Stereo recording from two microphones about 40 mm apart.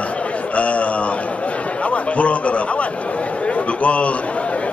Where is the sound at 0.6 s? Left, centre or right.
Left.